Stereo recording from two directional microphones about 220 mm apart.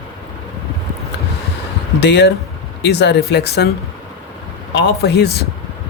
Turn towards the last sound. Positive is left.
turn(degrees=45)  # may be behind; listen again after turning